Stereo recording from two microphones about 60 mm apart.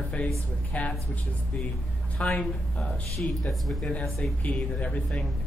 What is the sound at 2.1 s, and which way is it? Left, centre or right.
Speech, centre.